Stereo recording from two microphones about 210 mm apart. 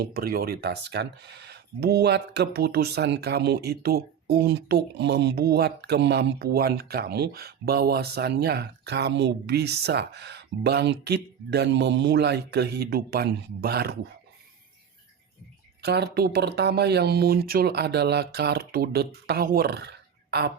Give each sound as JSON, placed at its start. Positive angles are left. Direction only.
{"t": 0.0, "sound": "speech", "side_deg": -45}
{"t": 15.8, "sound": "speech", "side_deg": -50}